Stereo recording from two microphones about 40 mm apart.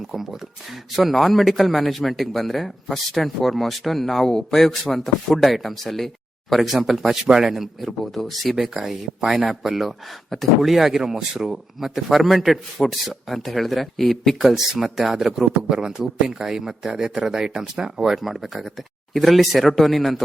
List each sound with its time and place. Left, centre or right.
0.1 s a man's voice: centre
4.9 s a man's voice: centre
7.3 s speech: centre
8.0 s a man's voice: centre
8.8 s a man's voice: centre
14.4 s speech: centre
18.1 s a man's voice: centre